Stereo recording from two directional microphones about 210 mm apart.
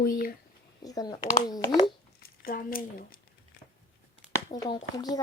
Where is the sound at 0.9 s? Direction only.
15° left (ahead or behind).